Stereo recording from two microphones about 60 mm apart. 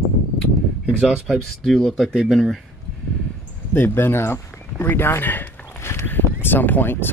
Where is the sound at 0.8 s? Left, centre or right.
Centre.